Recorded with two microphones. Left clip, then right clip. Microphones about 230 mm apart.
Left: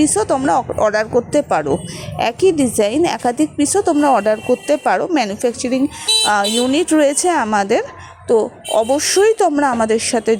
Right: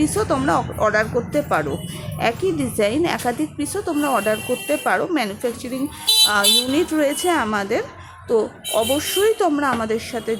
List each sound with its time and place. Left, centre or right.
0.0 s a woman's voice: left